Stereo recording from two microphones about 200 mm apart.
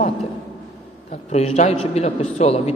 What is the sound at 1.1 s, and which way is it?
A man's voice, 30° left (ahead or behind).